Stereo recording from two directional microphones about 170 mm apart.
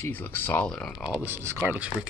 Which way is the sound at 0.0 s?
10° left (ahead or behind).